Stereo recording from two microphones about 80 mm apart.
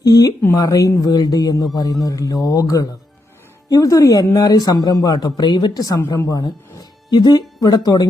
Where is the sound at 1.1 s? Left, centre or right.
Left.